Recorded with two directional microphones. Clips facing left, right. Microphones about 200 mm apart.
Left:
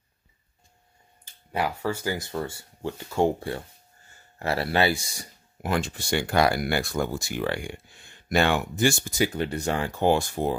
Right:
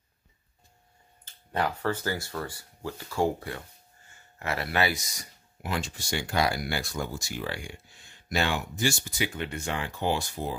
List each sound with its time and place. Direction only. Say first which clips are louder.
1.2 s speech: left 1 dB; 10° left (ahead or behind); by 5.3 s 30° left (ahead or behind)
5.6 s speech: left 6 dB; 55° left (ahead or behind)